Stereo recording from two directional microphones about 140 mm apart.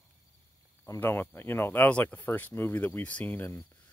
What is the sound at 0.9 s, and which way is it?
Speech, 15° left (ahead or behind).